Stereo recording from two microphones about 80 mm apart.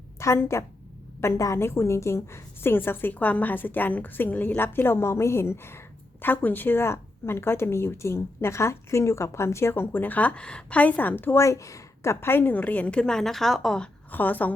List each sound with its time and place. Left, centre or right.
0.2 s a woman's voice: left
11.3 s a woman's voice: left; by 13.9 s centre
14.1 s a woman's voice: left